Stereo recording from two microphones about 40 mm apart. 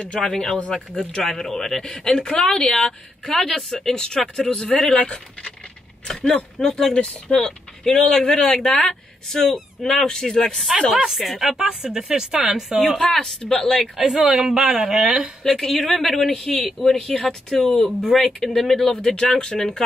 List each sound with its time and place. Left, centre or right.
0.2 s speech: centre; by 5.5 s left
6.0 s speech: centre
7.0 s speech: left; by 10.7 s centre
11.1 s speech: centre
11.5 s speech: centre
12.8 s speech: centre
13.9 s speech: centre
15.4 s speech: centre
18.9 s speech: centre